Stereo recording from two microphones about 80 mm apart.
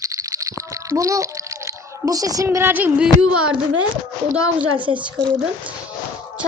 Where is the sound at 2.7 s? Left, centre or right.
Right.